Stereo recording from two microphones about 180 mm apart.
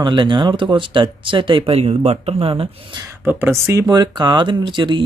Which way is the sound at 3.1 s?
15° right (ahead or behind).